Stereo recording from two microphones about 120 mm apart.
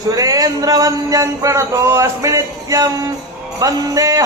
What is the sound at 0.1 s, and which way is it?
Speech, 30° right (ahead or behind).